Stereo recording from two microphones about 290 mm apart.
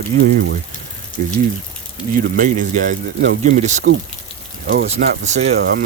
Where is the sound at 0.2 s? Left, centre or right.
Right.